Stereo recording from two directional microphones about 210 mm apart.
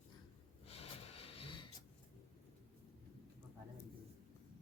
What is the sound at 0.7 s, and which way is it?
Snort, 30° left (ahead or behind).